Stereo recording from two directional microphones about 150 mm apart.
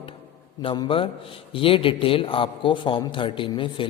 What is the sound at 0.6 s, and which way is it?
A woman's voice, 35° left (ahead or behind).